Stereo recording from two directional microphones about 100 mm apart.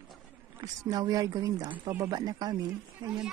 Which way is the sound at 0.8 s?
40° right (ahead or behind).